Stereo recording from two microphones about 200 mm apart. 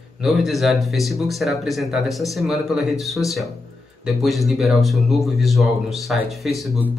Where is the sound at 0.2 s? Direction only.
Centre (ahead or behind).